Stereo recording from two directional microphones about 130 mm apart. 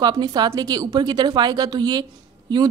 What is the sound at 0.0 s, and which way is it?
Speech, 30° right (ahead or behind).